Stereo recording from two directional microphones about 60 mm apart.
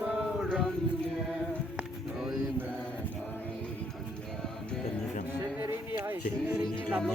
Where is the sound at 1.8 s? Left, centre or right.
Centre.